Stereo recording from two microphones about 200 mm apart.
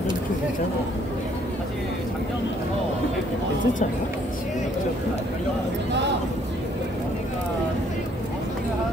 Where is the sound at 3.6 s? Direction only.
40° left (ahead or behind).